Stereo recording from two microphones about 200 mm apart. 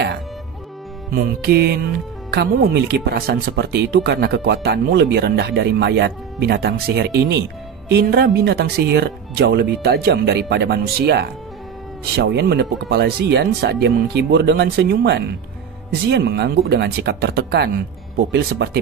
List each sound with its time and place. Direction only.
1.1 s speech: 50° right (ahead or behind)